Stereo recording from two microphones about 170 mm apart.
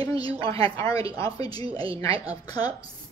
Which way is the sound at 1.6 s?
35° right (ahead or behind).